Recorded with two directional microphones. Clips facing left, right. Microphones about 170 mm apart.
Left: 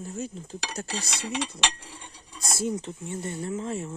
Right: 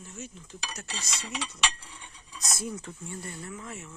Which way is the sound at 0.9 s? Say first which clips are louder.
Left 6 dB; 60° left (ahead or behind).